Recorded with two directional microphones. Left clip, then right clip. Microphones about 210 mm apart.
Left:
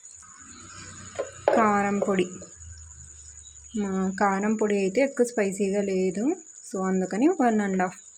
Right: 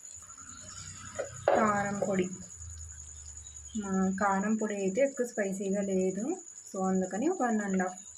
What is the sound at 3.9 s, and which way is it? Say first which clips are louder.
A woman's voice: left 4 dB; 45° left (ahead or behind).